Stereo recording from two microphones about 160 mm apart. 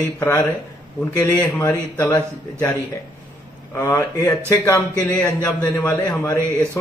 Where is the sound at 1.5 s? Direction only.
15° left (ahead or behind).